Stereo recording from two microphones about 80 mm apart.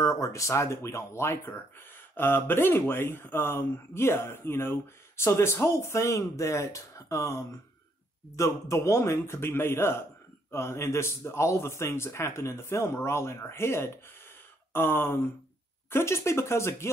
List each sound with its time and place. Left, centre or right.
0.0 s speech: left
14.7 s a sound: left
15.9 s speech: left